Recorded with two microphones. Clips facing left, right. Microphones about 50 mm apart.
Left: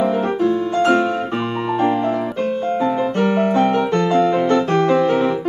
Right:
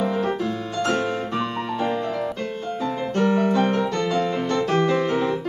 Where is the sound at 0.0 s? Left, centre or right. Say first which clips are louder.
Left 6 dB; left.